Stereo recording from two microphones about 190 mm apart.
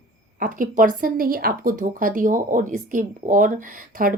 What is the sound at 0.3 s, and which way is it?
A woman's voice, 45° right (ahead or behind).